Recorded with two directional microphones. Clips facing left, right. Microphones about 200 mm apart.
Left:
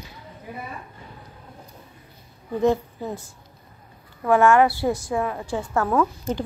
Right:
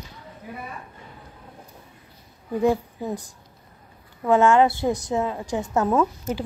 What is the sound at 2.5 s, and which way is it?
Speech, 15° right (ahead or behind).